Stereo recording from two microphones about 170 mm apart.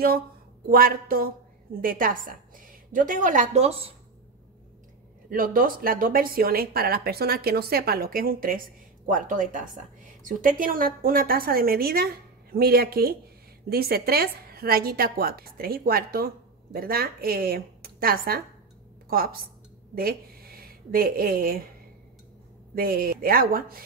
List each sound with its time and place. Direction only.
0.7 s a woman's voice: 60° right (ahead or behind); by 3.9 s 35° right (ahead or behind)
5.3 s speech: 55° right (ahead or behind)
22.8 s speech: 60° right (ahead or behind)